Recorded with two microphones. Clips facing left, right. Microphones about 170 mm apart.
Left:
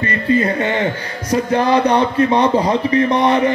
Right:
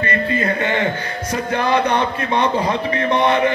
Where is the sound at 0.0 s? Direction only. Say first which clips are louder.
Left 4 dB; 30° left (ahead or behind).